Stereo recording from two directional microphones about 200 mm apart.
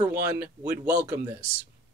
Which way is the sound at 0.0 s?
10° right (ahead or behind).